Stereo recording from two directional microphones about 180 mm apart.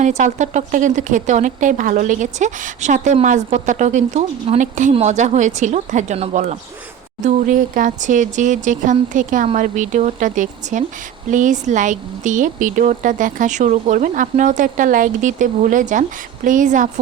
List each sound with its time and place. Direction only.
0.0 s speech: 45° right (ahead or behind)